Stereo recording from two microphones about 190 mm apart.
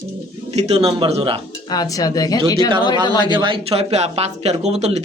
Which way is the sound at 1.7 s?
20° left (ahead or behind).